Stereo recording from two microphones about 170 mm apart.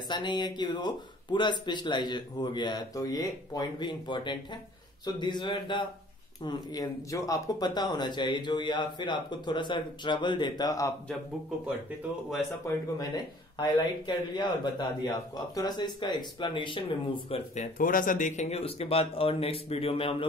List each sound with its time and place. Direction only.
0.1 s speech: 25° left (ahead or behind)
12.9 s speech: 25° left (ahead or behind)
17.6 s speech: 55° left (ahead or behind); by 20.2 s 35° left (ahead or behind)